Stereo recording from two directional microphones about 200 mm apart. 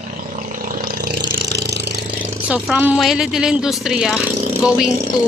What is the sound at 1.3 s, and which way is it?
Engine, 55° right (ahead or behind).